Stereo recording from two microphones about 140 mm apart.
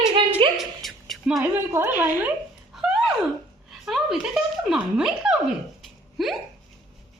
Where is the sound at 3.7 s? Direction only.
Centre (ahead or behind).